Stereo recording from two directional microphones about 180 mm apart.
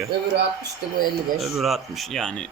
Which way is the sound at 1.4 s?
Centre (ahead or behind).